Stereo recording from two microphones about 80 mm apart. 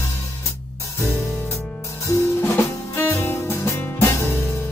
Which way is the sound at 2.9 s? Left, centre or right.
Left.